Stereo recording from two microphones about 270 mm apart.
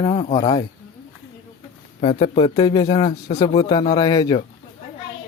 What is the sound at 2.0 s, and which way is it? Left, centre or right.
A man's voice, left.